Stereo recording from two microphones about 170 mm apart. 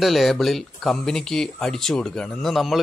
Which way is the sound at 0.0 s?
Centre (ahead or behind).